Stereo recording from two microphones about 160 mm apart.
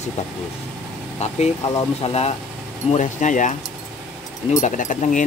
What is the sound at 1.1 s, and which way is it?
Speech, 40° left (ahead or behind).